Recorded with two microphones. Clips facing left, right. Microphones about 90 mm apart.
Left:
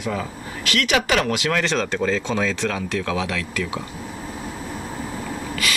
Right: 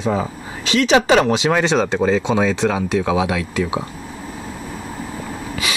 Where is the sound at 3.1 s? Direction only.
20° right (ahead or behind).